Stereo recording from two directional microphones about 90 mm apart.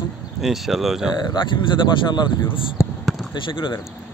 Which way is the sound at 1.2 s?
60° left (ahead or behind).